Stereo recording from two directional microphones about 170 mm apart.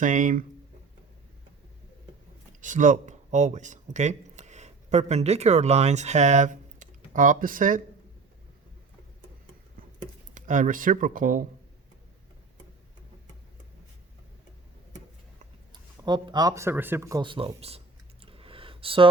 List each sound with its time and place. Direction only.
0.0 s speech: 50° right (ahead or behind)
2.6 s speech: 50° right (ahead or behind)
10.3 s speech: 50° right (ahead or behind)
15.7 s a man's voice: 25° right (ahead or behind)
17.2 s a sound: 30° right (ahead or behind)